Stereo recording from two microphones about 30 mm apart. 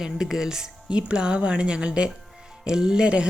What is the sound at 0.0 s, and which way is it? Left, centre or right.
Speech, centre.